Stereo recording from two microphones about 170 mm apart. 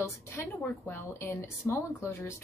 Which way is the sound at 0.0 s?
15° left (ahead or behind).